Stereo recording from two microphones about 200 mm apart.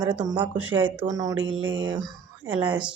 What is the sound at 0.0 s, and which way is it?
Speech, 10° right (ahead or behind).